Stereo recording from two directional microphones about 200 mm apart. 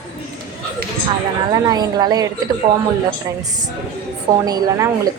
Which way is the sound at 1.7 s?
20° right (ahead or behind).